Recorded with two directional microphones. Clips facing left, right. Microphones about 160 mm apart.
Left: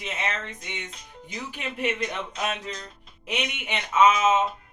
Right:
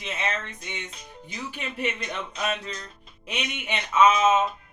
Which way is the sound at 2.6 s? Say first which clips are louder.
Left 1 dB; 15° left (ahead or behind).